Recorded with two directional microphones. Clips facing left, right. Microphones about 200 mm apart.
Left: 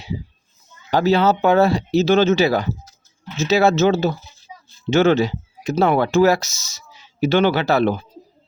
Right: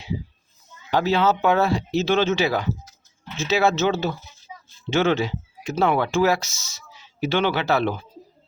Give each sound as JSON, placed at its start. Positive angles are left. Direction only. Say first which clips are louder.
{"t": 0.9, "sound": "speech", "louder": "left 4 dB", "side_deg": 35}